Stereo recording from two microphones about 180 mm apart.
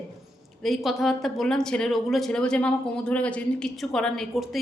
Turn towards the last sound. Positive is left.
turn(degrees=0)  # may be behind; listen again after turning